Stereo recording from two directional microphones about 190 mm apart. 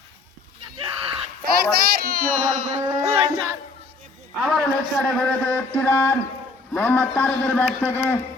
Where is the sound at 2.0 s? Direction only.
55° right (ahead or behind).